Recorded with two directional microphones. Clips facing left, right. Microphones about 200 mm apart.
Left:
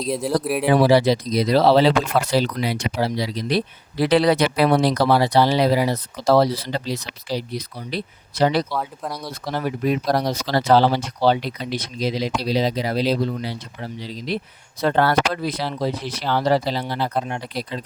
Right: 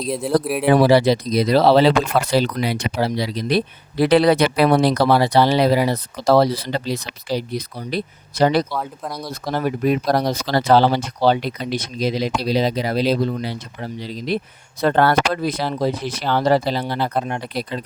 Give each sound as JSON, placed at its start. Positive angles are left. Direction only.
{"t": 0.1, "sound": "speech", "side_deg": 0}
{"t": 0.7, "sound": "speech", "side_deg": -60}
{"t": 8.7, "sound": "speech", "side_deg": 0}
{"t": 9.5, "sound": "speech", "side_deg": -50}